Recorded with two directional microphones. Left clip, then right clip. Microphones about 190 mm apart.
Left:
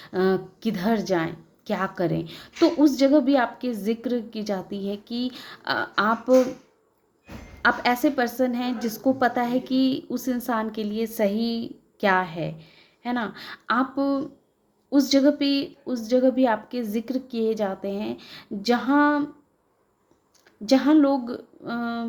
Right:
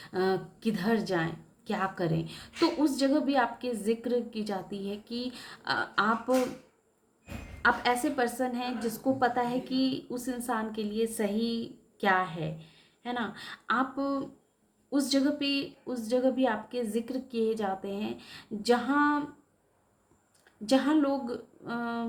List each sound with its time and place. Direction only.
0.0 s a woman's voice: 35° left (ahead or behind)
7.6 s a woman's voice: 35° left (ahead or behind)
20.7 s a woman's voice: 30° left (ahead or behind)